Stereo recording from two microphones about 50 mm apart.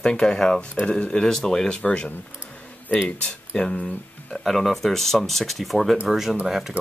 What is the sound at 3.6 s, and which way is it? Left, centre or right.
Speech, centre.